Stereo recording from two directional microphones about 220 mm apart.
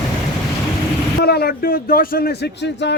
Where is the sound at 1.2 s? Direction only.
45° left (ahead or behind).